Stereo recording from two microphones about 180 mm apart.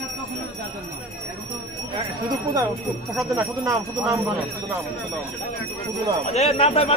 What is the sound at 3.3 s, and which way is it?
Speech, 15° right (ahead or behind).